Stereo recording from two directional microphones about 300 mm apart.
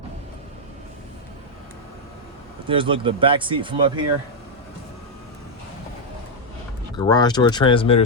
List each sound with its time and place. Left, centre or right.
2.6 s speech: centre
6.9 s speech: centre